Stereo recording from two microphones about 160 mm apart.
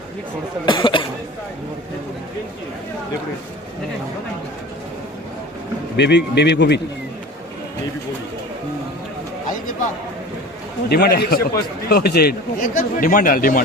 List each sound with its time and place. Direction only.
0.6 s speech: 30° left (ahead or behind)
6.0 s speech: 90° left
10.8 s a man's voice: 85° left; by 13.6 s 60° left (ahead or behind)